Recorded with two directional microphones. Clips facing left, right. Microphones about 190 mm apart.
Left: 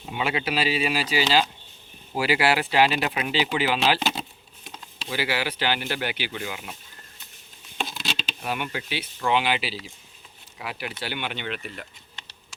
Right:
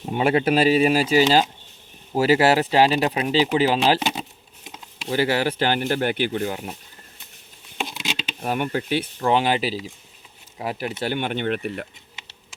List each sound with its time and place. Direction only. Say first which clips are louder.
0.0 s speech: right 8 dB; 45° right (ahead or behind)
4.0 s speech: right 2 dB; 15° right (ahead or behind)
5.0 s speech: right 7 dB; 45° right (ahead or behind)
7.8 s patter: right 2 dB; 15° right (ahead or behind)
8.4 s speech: right 7 dB; 40° right (ahead or behind)